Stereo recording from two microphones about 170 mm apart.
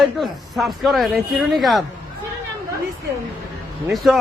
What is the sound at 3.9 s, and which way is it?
Speech, centre (ahead or behind).